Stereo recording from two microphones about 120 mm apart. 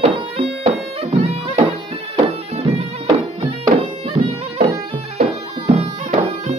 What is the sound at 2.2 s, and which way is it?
Bagpipes, 60° right (ahead or behind).